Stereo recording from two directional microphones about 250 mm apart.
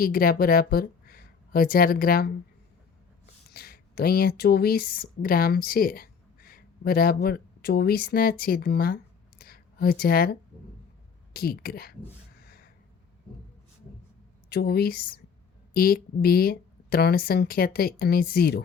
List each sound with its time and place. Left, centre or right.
0.0 s speech: left
3.5 s speech: left
9.4 s a sound: left
11.3 s speech: left
12.4 s a sound: left
14.5 s speech: left